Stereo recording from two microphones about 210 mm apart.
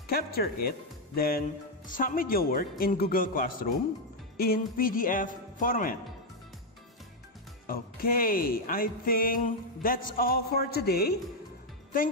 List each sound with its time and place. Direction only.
0.1 s speech: 45° left (ahead or behind)
7.6 s speech: 45° left (ahead or behind)